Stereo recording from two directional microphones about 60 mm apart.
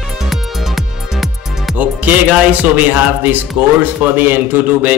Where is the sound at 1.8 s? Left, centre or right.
Right.